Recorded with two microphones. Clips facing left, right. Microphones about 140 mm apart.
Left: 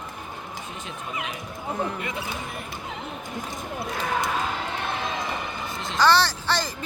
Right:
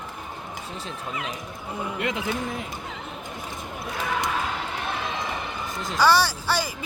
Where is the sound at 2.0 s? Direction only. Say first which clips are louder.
Right 5 dB; 90° right.